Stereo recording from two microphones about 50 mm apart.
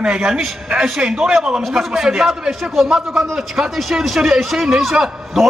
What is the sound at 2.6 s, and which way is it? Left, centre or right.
A man's voice, centre.